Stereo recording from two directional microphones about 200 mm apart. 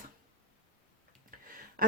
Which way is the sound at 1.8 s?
45° right (ahead or behind).